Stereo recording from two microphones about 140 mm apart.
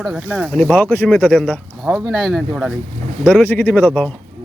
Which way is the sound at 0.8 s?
10° left (ahead or behind).